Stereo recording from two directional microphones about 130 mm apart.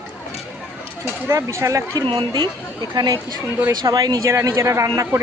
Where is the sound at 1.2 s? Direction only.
20° right (ahead or behind).